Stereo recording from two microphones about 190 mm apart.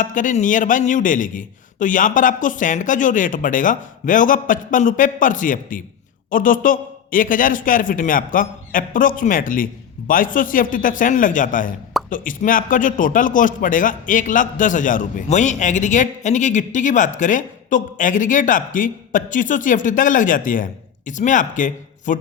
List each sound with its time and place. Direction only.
0.0 s a man's voice: 45° left (ahead or behind)